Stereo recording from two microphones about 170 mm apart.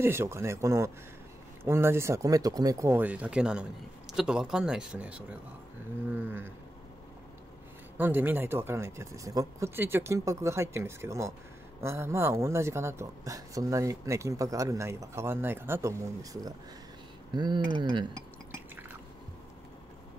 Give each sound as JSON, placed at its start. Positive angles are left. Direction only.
{"t": 0.0, "sound": "speech", "side_deg": -15}
{"t": 8.0, "sound": "speech", "side_deg": -10}